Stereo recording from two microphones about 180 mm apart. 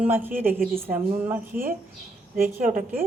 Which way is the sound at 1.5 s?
50° right (ahead or behind).